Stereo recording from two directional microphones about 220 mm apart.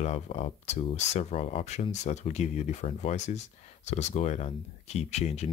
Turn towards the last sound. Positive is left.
turn(degrees=30)  # may be behind; listen again after turning